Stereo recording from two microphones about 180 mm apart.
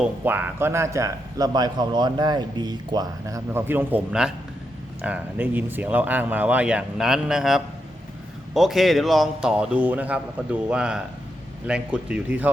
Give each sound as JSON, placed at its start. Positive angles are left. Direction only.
{"t": 0.0, "sound": "a man's voice", "side_deg": -10}